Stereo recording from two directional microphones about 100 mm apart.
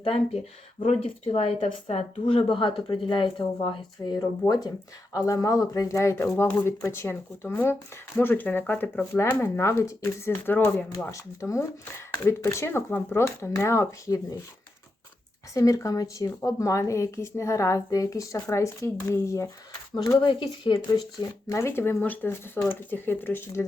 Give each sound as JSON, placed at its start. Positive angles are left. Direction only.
{"t": 0.8, "sound": "a woman's voice", "side_deg": 75}
{"t": 4.2, "sound": "speech", "side_deg": 40}
{"t": 6.2, "sound": "speech", "side_deg": 20}
{"t": 15.5, "sound": "speech", "side_deg": 35}
{"t": 20.1, "sound": "speech", "side_deg": 50}
{"t": 21.5, "sound": "speech", "side_deg": 25}